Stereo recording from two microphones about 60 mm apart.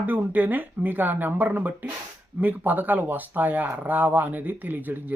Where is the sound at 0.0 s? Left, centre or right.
Right.